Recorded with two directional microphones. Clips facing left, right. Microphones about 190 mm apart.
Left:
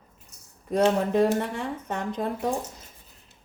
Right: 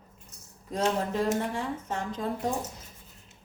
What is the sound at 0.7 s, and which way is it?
A woman's voice, 60° left (ahead or behind).